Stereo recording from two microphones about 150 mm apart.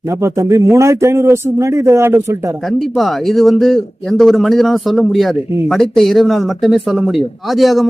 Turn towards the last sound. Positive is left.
turn(degrees=0)  # may be behind; listen again after turning